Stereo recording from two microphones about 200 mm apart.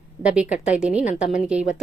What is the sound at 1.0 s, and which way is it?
Speech, 40° left (ahead or behind).